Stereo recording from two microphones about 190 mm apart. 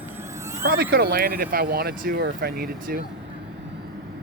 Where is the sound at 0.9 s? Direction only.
50° right (ahead or behind).